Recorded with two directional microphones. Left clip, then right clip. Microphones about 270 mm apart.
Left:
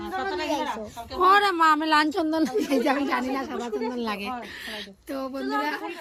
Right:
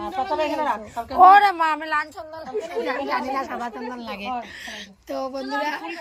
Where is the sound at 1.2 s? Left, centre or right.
Centre.